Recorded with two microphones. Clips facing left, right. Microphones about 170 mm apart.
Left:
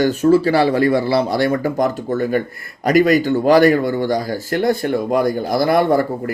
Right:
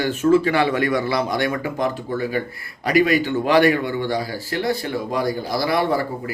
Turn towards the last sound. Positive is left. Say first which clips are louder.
# left 5 dB
turn(degrees=50)  # may be behind; listen again after turning